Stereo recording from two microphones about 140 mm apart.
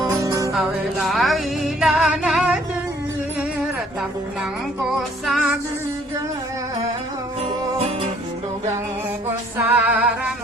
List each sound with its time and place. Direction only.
0.2 s music: 25° right (ahead or behind)
0.5 s music: 5° right (ahead or behind)
4.9 s music: centre (ahead or behind)
9.6 s music: 10° right (ahead or behind)